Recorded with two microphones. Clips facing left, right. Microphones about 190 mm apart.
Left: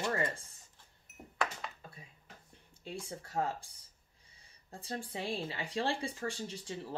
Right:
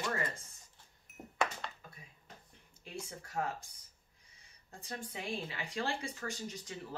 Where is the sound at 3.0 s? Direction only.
30° left (ahead or behind).